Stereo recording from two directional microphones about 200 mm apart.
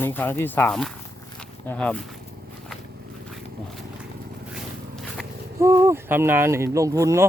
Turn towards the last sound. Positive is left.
turn(degrees=-15)  # may be behind; listen again after turning